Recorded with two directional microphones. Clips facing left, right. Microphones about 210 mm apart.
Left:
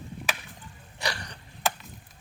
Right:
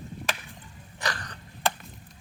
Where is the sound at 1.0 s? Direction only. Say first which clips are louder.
Even; 10° left (ahead or behind).